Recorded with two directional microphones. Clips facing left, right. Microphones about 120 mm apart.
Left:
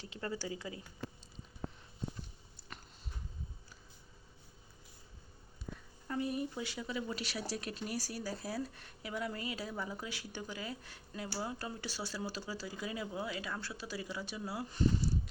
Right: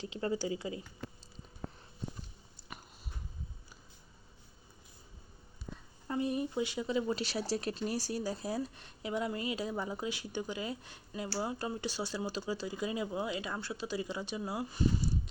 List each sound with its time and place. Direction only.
0.0 s speech: 20° right (ahead or behind)
2.6 s a sound: 15° right (ahead or behind)
6.1 s speech: 20° right (ahead or behind)